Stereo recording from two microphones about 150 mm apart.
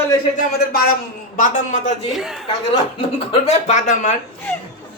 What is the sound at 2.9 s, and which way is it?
Speech, 35° left (ahead or behind).